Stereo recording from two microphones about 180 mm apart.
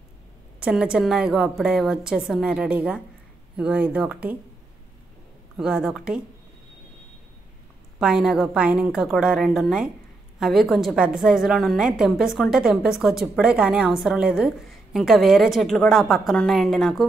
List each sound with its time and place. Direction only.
0.6 s a woman's voice: 5° right (ahead or behind)
5.6 s a woman's voice: 5° right (ahead or behind)
8.0 s a woman's voice: 5° right (ahead or behind)